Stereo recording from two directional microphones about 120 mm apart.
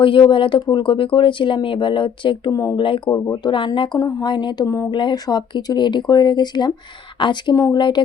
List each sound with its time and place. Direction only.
0.0 s speech: 45° left (ahead or behind)
2.5 s speech: 25° left (ahead or behind)
2.7 s speech: 45° left (ahead or behind)
3.1 s speech: 30° left (ahead or behind)
4.9 s speech: 40° left (ahead or behind)
7.5 s speech: 30° left (ahead or behind)
7.8 s speech: 40° left (ahead or behind)